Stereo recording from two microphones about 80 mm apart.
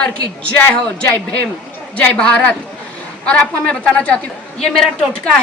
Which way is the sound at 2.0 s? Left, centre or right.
Centre.